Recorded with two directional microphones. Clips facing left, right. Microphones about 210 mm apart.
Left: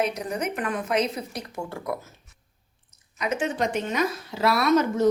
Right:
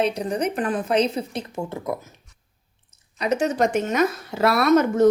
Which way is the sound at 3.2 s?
40° right (ahead or behind).